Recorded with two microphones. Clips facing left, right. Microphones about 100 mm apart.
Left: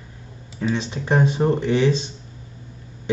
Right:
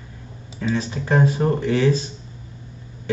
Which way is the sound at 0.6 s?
20° left (ahead or behind).